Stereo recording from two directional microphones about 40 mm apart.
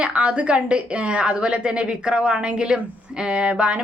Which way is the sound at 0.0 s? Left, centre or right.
Right.